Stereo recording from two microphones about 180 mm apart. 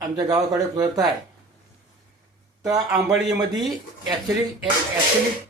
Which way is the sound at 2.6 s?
20° right (ahead or behind).